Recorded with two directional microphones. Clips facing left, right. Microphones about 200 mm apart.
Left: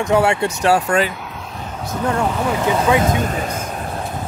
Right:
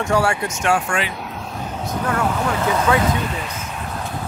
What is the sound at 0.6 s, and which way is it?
Speech, 35° left (ahead or behind).